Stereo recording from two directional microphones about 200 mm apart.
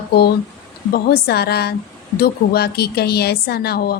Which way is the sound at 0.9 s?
50° left (ahead or behind).